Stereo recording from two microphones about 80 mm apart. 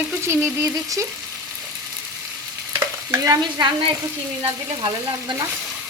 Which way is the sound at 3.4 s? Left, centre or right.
Right.